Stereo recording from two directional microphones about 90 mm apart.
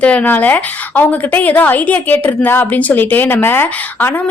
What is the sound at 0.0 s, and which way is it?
A woman's voice, 15° left (ahead or behind).